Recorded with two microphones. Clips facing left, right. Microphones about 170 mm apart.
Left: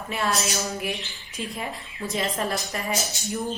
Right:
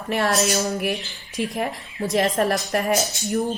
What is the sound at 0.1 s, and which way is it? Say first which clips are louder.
A woman's voice: right 6 dB; 65° right (ahead or behind).